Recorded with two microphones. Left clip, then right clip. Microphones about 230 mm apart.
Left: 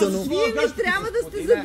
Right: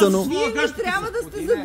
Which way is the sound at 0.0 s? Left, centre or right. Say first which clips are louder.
Right 5 dB; right.